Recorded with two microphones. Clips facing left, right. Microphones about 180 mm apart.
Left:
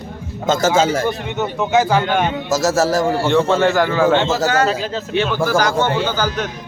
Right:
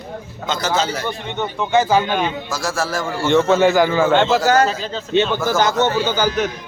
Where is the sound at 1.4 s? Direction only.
5° left (ahead or behind).